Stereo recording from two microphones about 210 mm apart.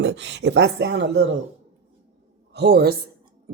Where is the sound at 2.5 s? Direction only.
50° right (ahead or behind).